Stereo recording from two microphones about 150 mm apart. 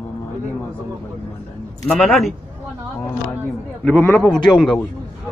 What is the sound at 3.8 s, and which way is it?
Speech, 10° left (ahead or behind).